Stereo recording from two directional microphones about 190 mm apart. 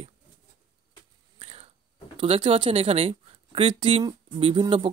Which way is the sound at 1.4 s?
30° right (ahead or behind).